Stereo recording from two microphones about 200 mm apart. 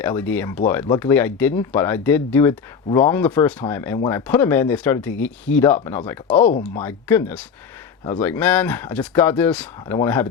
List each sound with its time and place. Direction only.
0.0 s speech: 10° left (ahead or behind)
6.2 s speech: 35° left (ahead or behind)
6.6 s speech: 10° left (ahead or behind)